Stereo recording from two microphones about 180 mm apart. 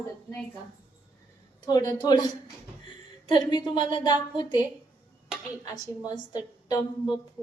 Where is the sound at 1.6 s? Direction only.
20° left (ahead or behind).